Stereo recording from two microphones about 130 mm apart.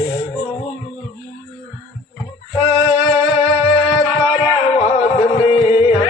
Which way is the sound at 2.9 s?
35° left (ahead or behind).